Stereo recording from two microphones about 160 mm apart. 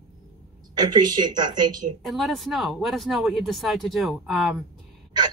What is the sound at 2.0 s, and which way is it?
Speech, centre (ahead or behind).